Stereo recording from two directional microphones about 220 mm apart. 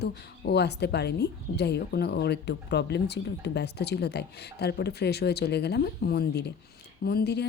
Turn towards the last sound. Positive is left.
turn(degrees=50)  # may be behind; listen again after turning